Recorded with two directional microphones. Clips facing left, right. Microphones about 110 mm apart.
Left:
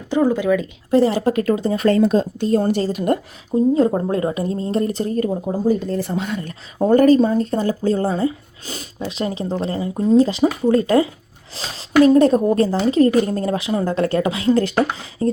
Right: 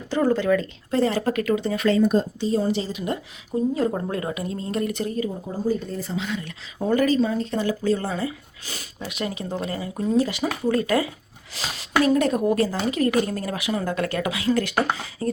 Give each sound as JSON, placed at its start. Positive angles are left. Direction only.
{"t": 0.1, "sound": "speech", "side_deg": 10}
{"t": 0.9, "sound": "speech", "side_deg": 25}
{"t": 2.0, "sound": "speech", "side_deg": 55}
{"t": 3.5, "sound": "speech", "side_deg": 25}
{"t": 5.3, "sound": "speech", "side_deg": 70}
{"t": 6.1, "sound": "speech", "side_deg": 50}